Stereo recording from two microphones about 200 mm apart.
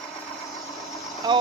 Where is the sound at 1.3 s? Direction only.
20° right (ahead or behind).